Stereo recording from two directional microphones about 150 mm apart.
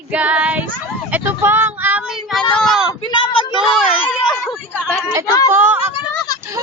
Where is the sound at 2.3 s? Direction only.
Centre (ahead or behind).